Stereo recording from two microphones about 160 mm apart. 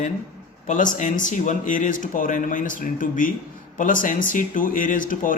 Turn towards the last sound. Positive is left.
turn(degrees=55)  # may be behind; listen again after turning